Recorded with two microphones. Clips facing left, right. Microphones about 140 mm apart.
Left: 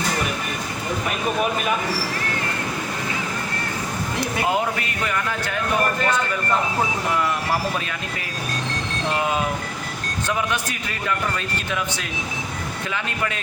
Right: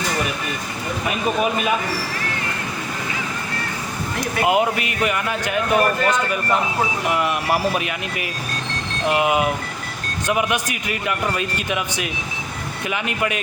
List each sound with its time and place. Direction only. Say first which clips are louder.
4.2 s speech: right 4 dB; 15° right (ahead or behind)
9.0 s speech: right 5 dB; 15° right (ahead or behind)